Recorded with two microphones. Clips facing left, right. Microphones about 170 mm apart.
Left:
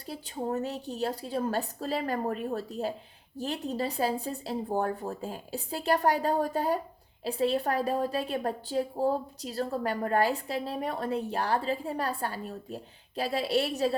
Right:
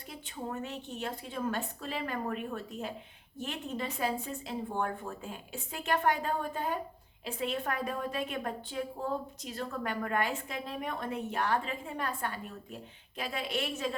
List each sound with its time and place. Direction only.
0.0 s a woman's voice: 35° left (ahead or behind)